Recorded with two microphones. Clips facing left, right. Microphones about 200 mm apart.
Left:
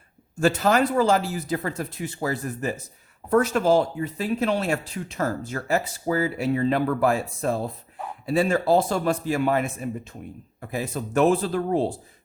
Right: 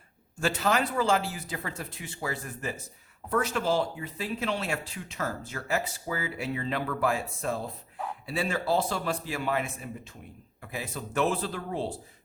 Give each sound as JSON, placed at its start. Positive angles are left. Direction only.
{"t": 0.3, "sound": "speech", "side_deg": 45}